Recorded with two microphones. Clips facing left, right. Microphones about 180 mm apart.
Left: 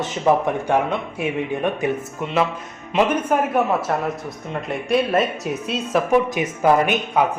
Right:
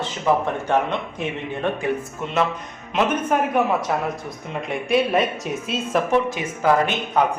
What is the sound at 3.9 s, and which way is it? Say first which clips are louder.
Speech: left 1 dB; 5° right (ahead or behind).